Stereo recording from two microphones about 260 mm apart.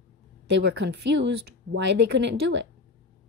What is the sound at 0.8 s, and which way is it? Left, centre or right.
Speech, right.